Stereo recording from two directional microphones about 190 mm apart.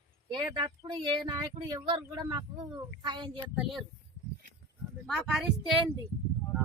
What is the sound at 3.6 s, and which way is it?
Speech, centre (ahead or behind).